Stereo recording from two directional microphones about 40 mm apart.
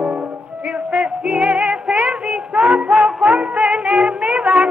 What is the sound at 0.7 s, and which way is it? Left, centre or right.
Music, right.